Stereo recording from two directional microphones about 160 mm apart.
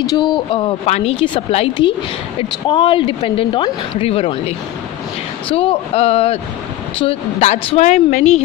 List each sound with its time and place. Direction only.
0.1 s a woman's voice: 25° left (ahead or behind); by 8.4 s 45° left (ahead or behind)